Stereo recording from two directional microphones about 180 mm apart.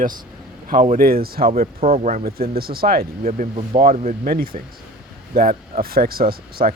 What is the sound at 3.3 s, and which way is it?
Speech, 35° right (ahead or behind).